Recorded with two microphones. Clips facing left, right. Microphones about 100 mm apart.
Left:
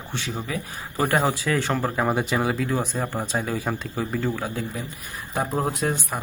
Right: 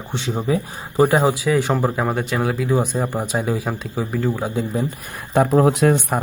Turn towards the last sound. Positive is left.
turn(degrees=-60)  # may be behind; listen again after turning